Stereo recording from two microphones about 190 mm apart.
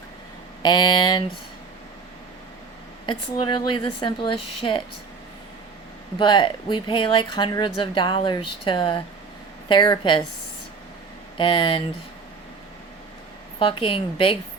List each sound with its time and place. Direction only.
0.6 s speech: 20° left (ahead or behind)
3.1 s speech: 25° left (ahead or behind)
6.1 s speech: 25° left (ahead or behind)
11.3 s speech: 25° left (ahead or behind)
13.6 s speech: 30° left (ahead or behind)